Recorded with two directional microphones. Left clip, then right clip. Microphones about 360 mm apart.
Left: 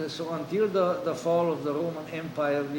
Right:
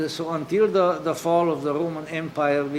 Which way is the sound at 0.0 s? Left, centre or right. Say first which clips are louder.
Right 5 dB; right.